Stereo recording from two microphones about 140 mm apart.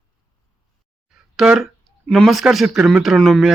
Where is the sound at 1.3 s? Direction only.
5° right (ahead or behind).